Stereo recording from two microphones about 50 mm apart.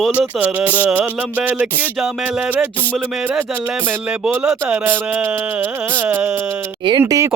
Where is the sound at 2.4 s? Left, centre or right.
Right.